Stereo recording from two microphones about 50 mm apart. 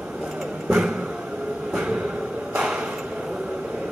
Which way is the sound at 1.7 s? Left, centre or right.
Right.